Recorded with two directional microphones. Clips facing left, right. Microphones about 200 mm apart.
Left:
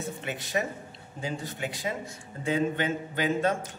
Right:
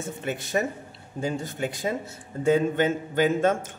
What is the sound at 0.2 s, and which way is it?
A man's voice, 50° right (ahead or behind).